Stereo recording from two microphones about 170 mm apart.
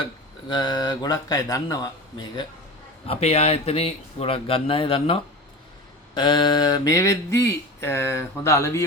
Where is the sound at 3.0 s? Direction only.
35° left (ahead or behind).